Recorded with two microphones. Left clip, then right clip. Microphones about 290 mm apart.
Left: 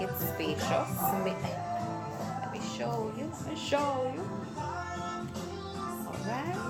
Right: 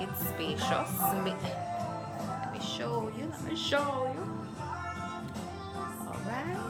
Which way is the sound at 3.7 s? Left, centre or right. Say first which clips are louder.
Left 1 dB; centre.